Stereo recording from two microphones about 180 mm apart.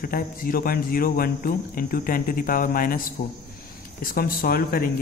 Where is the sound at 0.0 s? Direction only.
55° left (ahead or behind).